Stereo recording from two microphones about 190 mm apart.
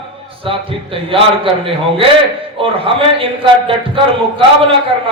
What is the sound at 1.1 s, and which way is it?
Speech, 30° right (ahead or behind).